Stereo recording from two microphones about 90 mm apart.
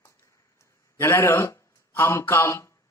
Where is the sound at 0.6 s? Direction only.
30° left (ahead or behind).